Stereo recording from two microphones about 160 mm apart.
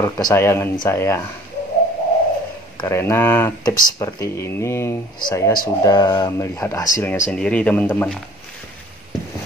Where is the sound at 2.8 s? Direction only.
15° left (ahead or behind).